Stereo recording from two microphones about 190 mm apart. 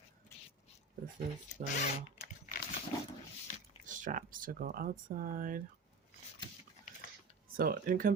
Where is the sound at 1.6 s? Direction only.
45° right (ahead or behind).